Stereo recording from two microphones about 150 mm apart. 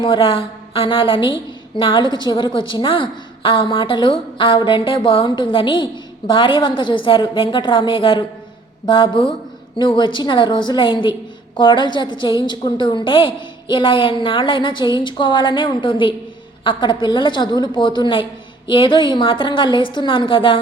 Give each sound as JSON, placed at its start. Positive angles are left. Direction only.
{"t": 0.0, "sound": "a woman's voice", "side_deg": 35}